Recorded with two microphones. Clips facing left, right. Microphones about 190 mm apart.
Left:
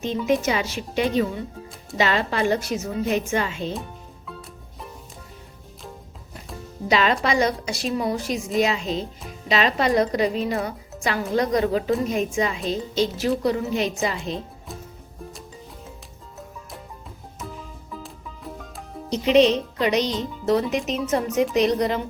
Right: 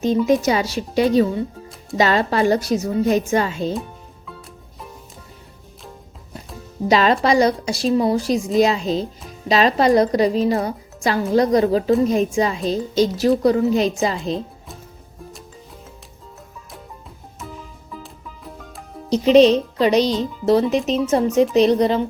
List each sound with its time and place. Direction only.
0.4 s a woman's voice: 35° right (ahead or behind)
4.3 s music: centre (ahead or behind)
6.9 s a woman's voice: 35° right (ahead or behind)
17.9 s music: centre (ahead or behind)
19.1 s a woman's voice: 35° right (ahead or behind)